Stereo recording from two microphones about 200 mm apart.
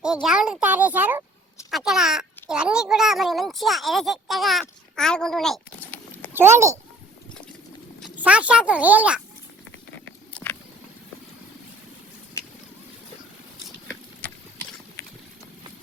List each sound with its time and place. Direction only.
0.0 s a child's voice: 5° right (ahead or behind)
4.9 s a sound: 5° left (ahead or behind)
6.3 s a child's voice: 10° right (ahead or behind)
8.2 s a child's voice: 5° right (ahead or behind)